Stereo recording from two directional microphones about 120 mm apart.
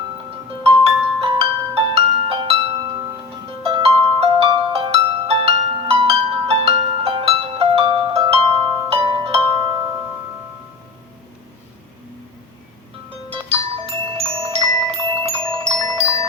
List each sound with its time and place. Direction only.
0.9 s music: 50° right (ahead or behind)
13.3 s music: 50° right (ahead or behind)